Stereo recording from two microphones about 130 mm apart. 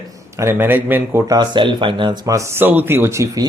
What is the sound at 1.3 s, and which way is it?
Speech, 35° right (ahead or behind).